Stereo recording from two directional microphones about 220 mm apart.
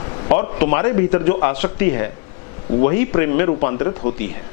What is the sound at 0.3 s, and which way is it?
A man's voice, 15° left (ahead or behind).